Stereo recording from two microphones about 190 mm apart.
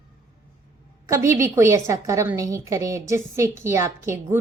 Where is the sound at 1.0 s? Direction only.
15° right (ahead or behind).